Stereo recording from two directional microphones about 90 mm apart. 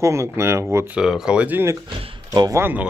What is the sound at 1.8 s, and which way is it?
Speech, 80° right.